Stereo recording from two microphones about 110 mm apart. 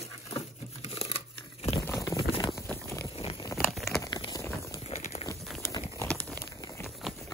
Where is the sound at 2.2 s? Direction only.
45° left (ahead or behind).